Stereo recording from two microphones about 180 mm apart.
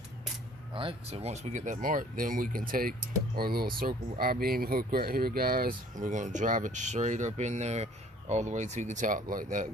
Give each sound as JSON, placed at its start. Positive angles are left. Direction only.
{"t": 0.7, "sound": "speech", "side_deg": -30}